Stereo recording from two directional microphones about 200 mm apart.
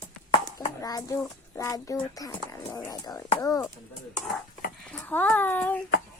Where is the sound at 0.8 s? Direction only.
20° left (ahead or behind).